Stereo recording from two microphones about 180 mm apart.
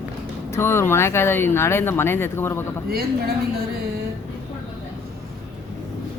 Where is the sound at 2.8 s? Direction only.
60° right (ahead or behind).